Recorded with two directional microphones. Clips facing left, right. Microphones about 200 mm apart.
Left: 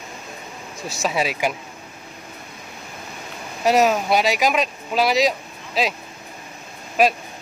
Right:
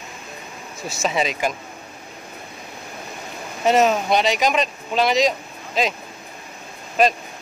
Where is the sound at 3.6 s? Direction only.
Centre (ahead or behind).